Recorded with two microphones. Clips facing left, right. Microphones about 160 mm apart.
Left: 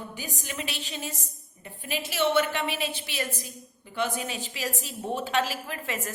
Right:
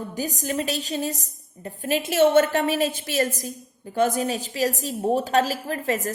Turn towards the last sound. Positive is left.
turn(degrees=-40)  # may be behind; listen again after turning